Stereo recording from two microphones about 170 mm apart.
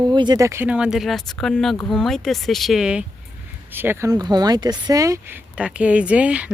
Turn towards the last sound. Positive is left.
turn(degrees=-5)  # may be behind; listen again after turning